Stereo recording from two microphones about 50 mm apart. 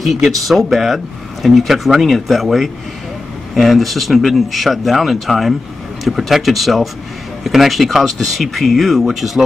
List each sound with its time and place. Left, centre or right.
0.0 s speech: centre